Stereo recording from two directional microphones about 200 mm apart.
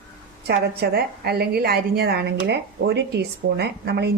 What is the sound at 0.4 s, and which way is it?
A woman's voice, 50° right (ahead or behind).